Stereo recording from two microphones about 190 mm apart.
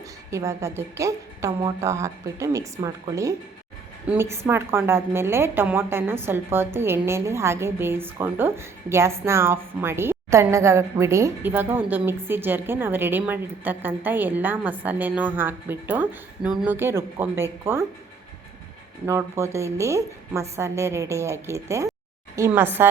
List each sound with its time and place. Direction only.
0.3 s a woman's voice: 15° right (ahead or behind)
19.0 s a woman's voice: 15° right (ahead or behind)